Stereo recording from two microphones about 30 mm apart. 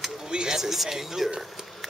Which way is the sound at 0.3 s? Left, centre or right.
Right.